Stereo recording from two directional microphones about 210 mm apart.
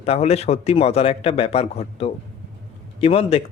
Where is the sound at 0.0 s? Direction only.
30° left (ahead or behind).